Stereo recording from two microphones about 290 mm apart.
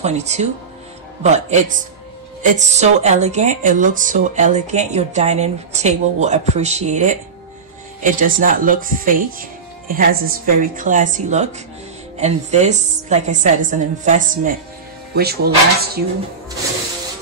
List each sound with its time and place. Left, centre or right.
0.0 s a woman's voice: right